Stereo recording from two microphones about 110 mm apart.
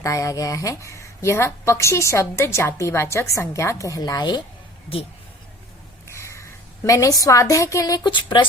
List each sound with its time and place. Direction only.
0.0 s a woman's voice: 30° left (ahead or behind)
6.1 s a woman's voice: 25° left (ahead or behind); by 8.4 s 45° left (ahead or behind)